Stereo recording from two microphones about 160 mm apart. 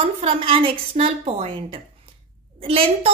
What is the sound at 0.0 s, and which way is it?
A woman's voice, 35° right (ahead or behind).